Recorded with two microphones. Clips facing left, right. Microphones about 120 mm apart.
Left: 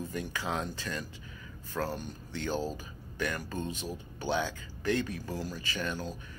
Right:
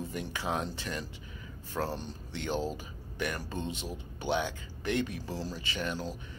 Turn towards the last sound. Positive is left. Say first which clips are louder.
# even
turn(degrees=-25)  # may be behind; listen again after turning